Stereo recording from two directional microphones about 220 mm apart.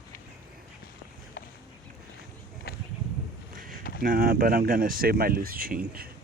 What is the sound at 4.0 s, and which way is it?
Speech, 40° right (ahead or behind).